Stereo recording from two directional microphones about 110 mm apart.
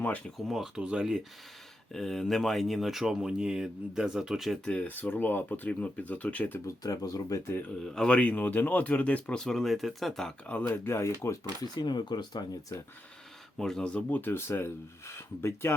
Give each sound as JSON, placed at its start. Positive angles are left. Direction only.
{"t": 0.4, "sound": "speech", "side_deg": -5}
{"t": 4.7, "sound": "speech", "side_deg": 15}
{"t": 6.8, "sound": "speech", "side_deg": 35}
{"t": 7.9, "sound": "speech", "side_deg": 10}
{"t": 11.8, "sound": "speech", "side_deg": 40}
{"t": 13.6, "sound": "speech", "side_deg": 5}